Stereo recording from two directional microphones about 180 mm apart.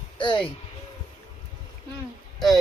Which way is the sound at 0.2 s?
25° left (ahead or behind).